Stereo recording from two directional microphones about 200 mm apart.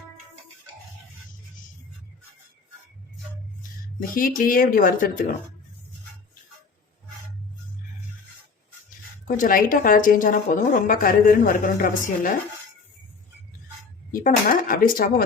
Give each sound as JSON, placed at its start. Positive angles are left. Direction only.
{"t": 4.1, "sound": "a woman's voice", "side_deg": 45}
{"t": 9.2, "sound": "a woman's voice", "side_deg": 45}
{"t": 14.1, "sound": "a woman's voice", "side_deg": 45}